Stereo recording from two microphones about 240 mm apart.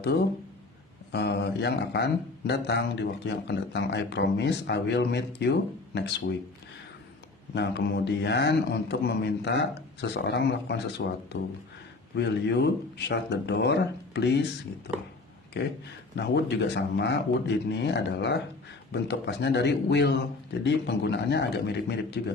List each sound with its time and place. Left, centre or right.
1.1 s a man's voice: left
7.5 s a man's voice: left